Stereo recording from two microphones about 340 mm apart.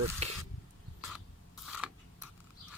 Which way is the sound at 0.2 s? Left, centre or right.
Centre.